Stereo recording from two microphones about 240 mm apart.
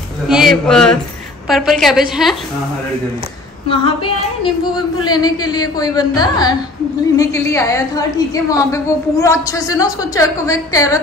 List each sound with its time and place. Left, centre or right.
0.3 s a woman's voice: centre
3.6 s a woman's voice: left